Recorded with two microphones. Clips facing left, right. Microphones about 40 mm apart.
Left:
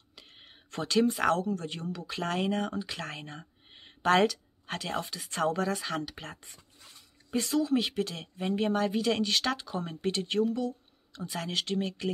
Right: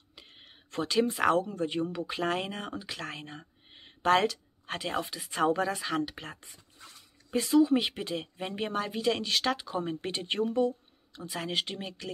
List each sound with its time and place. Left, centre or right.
0.1 s a sound: centre
0.4 s speech: centre; by 2.1 s right
2.1 s speech: centre
7.6 s speech: centre
8.4 s speech: centre
10.2 s speech: right
11.1 s speech: centre